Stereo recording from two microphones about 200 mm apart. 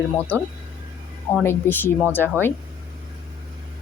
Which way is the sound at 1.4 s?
10° left (ahead or behind).